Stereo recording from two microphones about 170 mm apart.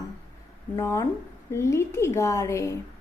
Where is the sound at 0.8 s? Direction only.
15° left (ahead or behind).